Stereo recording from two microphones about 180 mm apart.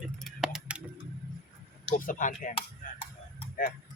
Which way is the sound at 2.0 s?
45° left (ahead or behind).